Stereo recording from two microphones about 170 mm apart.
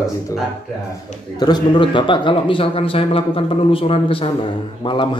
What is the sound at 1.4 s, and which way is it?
A man's voice, 25° left (ahead or behind).